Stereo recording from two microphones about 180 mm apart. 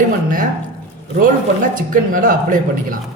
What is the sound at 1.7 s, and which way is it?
Speech, 50° right (ahead or behind).